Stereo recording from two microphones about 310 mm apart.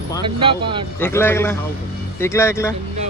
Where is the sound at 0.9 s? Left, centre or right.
Centre.